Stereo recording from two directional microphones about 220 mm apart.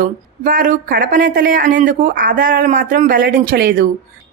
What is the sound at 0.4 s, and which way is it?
A woman's voice, 40° right (ahead or behind).